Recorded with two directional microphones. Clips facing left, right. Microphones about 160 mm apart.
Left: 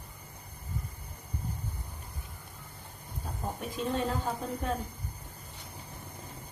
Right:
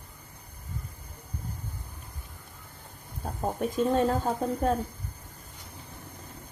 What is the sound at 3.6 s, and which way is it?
Speech, 45° right (ahead or behind).